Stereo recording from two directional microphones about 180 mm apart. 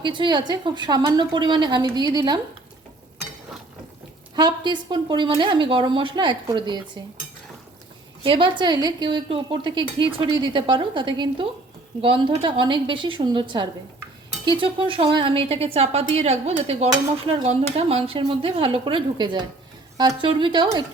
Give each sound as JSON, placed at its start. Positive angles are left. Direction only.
{"t": 0.0, "sound": "a woman's voice", "side_deg": -25}
{"t": 4.4, "sound": "a woman's voice", "side_deg": -25}
{"t": 8.2, "sound": "a woman's voice", "side_deg": -30}